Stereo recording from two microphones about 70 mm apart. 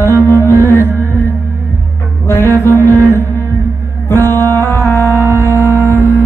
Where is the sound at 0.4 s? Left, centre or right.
Left.